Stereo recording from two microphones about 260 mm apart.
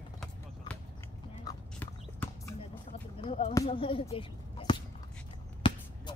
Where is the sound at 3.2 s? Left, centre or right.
Left.